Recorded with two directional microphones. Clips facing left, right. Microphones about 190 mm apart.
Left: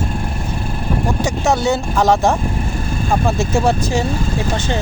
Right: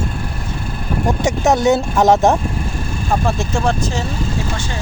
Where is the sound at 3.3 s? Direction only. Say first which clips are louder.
Left 4 dB; 5° left (ahead or behind).